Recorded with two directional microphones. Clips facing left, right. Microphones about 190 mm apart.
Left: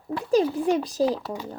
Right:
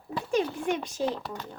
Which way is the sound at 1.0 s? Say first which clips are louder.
Left 5 dB; 5° left (ahead or behind).